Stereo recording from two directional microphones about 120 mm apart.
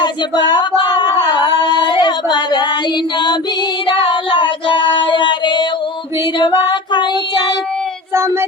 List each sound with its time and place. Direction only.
0.0 s child singing: 40° left (ahead or behind)
0.8 s a sound: 40° left (ahead or behind)
3.8 s child singing: 45° left (ahead or behind)
8.1 s child singing: 20° right (ahead or behind)